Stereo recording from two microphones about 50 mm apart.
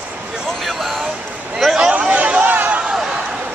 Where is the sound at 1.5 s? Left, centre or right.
Centre.